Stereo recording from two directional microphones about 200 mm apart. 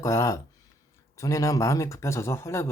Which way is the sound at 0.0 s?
15° left (ahead or behind).